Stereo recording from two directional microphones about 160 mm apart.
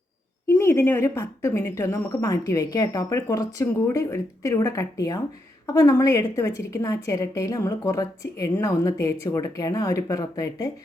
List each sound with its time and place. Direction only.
0.4 s a woman's voice: 15° left (ahead or behind)